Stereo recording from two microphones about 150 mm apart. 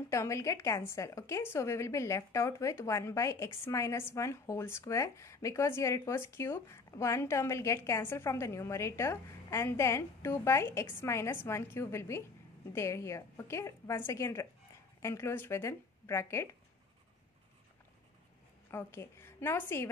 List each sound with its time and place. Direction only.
0.1 s a woman's voice: 20° left (ahead or behind)
18.7 s a woman's voice: 15° left (ahead or behind)